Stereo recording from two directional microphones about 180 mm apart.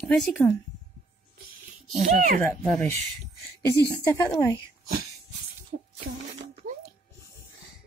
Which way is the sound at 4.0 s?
15° left (ahead or behind).